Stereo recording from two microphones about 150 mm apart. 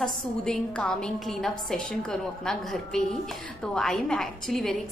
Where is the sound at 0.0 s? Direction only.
5° left (ahead or behind).